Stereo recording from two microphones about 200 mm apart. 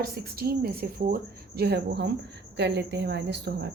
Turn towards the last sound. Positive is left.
turn(degrees=-60)  # may be behind; listen again after turning